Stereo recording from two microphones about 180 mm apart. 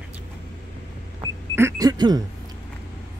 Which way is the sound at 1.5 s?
15° right (ahead or behind).